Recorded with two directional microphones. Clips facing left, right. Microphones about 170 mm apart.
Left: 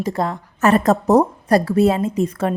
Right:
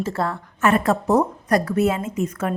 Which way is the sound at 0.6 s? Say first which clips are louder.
Left 4 dB; 40° left (ahead or behind).